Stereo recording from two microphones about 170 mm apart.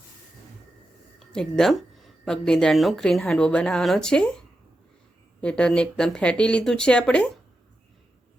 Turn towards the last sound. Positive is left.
turn(degrees=5)  # may be behind; listen again after turning